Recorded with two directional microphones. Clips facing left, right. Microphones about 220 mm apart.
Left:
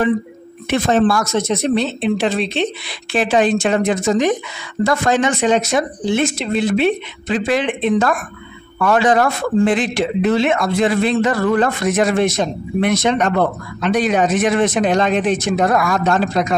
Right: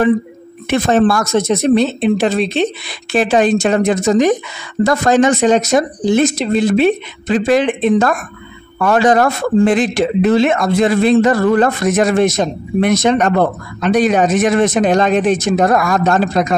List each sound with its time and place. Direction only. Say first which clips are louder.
0.7 s a man's voice: right 2 dB; 50° right (ahead or behind)